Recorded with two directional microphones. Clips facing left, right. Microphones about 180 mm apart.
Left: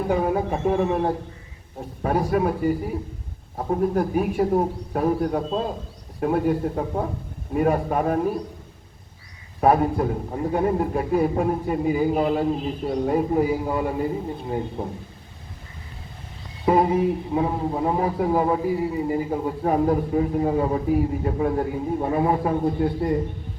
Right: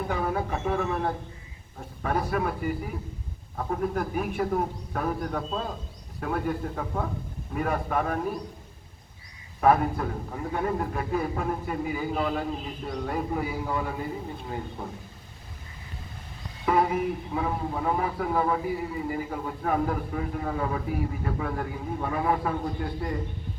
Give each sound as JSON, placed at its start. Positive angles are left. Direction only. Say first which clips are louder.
{"t": 0.7, "sound": "a man's voice", "louder": "left 6 dB", "side_deg": 30}
{"t": 9.6, "sound": "a man's voice", "louder": "left 3 dB", "side_deg": 30}
{"t": 16.6, "sound": "a man's voice", "louder": "left 5 dB", "side_deg": 30}